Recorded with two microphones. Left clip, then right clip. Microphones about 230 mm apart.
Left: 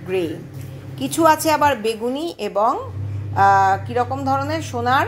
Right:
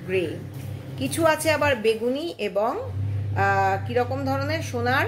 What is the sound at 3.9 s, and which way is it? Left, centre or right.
Speech, left.